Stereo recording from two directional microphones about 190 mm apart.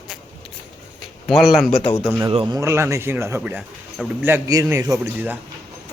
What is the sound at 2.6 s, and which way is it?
Speech, 15° right (ahead or behind).